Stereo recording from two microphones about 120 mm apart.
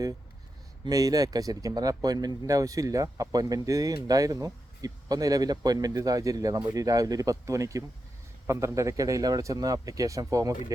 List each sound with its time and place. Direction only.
0.9 s speech: 30° right (ahead or behind)